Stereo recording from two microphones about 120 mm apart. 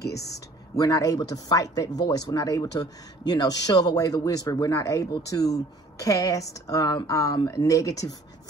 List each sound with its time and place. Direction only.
0.7 s speech: 30° left (ahead or behind)